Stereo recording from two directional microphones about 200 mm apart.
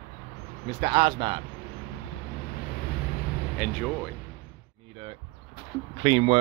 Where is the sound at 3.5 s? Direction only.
5° left (ahead or behind).